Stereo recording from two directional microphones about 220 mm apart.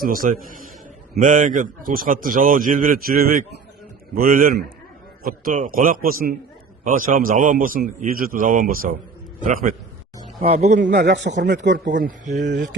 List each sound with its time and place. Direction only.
0.0 s a man's voice: 40° right (ahead or behind); by 11.9 s 55° right (ahead or behind)
11.9 s a man's voice: 35° right (ahead or behind)